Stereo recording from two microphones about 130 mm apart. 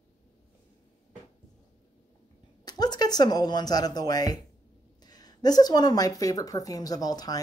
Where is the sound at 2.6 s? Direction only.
30° left (ahead or behind).